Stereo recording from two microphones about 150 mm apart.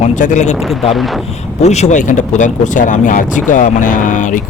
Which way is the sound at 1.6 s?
50° left (ahead or behind).